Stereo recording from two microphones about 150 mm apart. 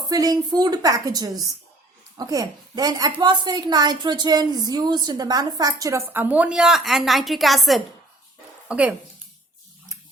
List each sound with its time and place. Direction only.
0.1 s a woman's voice: 25° right (ahead or behind); by 9.0 s 10° right (ahead or behind)